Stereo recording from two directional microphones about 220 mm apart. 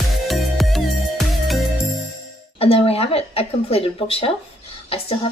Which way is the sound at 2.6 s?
25° left (ahead or behind).